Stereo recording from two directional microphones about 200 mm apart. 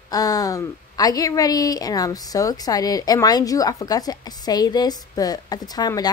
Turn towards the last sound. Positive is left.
turn(degrees=20)  # may be behind; listen again after turning